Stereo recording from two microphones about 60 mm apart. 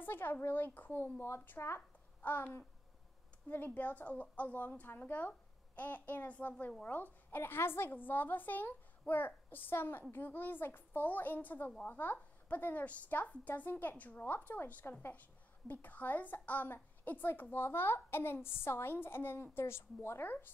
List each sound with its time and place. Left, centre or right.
0.0 s a woman's voice: left